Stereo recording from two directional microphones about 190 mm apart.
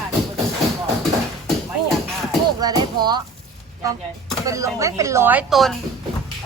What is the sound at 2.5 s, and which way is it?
Speech, 20° right (ahead or behind).